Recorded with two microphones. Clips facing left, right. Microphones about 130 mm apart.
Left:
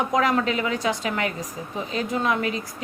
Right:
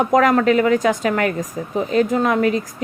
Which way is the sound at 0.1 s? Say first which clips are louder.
Right 7 dB; 45° right (ahead or behind).